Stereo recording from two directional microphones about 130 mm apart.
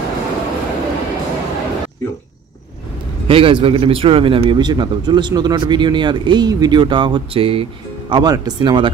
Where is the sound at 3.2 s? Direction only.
45° right (ahead or behind).